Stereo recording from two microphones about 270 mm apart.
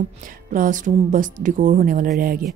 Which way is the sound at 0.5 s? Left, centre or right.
Right.